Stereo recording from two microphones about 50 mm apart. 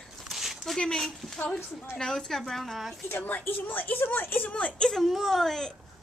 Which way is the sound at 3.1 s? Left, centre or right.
Left.